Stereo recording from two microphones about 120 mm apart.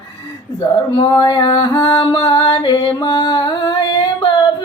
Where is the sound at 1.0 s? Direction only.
40° left (ahead or behind).